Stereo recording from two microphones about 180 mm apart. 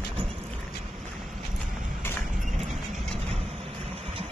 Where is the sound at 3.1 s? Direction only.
35° right (ahead or behind).